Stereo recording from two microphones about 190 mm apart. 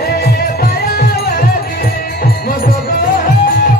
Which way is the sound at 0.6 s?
55° left (ahead or behind).